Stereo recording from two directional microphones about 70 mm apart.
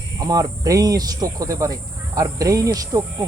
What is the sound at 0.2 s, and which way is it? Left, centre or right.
Speech, right.